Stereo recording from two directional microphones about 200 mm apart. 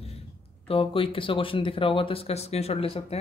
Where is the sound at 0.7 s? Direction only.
25° left (ahead or behind).